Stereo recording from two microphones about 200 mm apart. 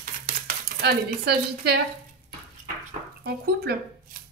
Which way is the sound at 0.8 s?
50° right (ahead or behind).